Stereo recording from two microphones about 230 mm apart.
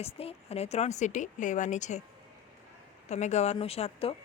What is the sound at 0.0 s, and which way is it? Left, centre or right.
Speech, left.